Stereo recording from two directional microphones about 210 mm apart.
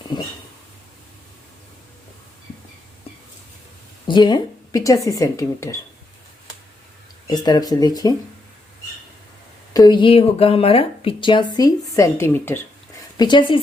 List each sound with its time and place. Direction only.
0.1 s speech: 20° left (ahead or behind)
4.0 s speech: 20° left (ahead or behind)
7.3 s speech: 20° left (ahead or behind)
9.7 s a woman's voice: 20° left (ahead or behind)
13.1 s speech: 20° left (ahead or behind)